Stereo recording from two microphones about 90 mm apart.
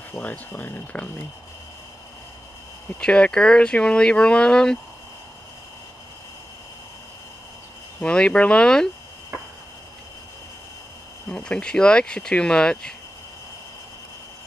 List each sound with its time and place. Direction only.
0.2 s speech: 20° left (ahead or behind)
3.0 s speech: 10° left (ahead or behind)
8.0 s speech: 10° left (ahead or behind)
11.2 s speech: 10° left (ahead or behind)